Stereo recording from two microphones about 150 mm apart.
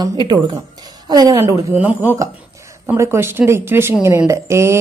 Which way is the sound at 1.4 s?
15° right (ahead or behind).